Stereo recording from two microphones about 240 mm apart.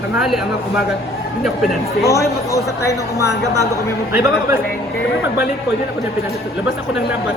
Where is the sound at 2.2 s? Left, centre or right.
Centre.